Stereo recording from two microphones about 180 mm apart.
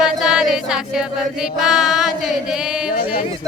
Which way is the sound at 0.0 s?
5° right (ahead or behind).